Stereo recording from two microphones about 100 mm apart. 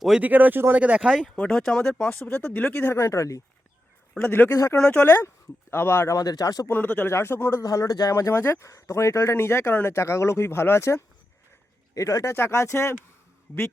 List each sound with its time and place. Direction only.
0.2 s speech: 15° right (ahead or behind)
1.2 s speech: 10° left (ahead or behind)
2.9 s speech: 25° left (ahead or behind)
4.1 s speech: 15° left (ahead or behind)
4.5 s speech: 35° left (ahead or behind)
4.8 s speech: 15° left (ahead or behind)
6.1 s speech: 40° left (ahead or behind)
6.7 s speech: 20° left (ahead or behind)
7.6 s speech: 35° left (ahead or behind)
8.1 s speech: 25° left (ahead or behind)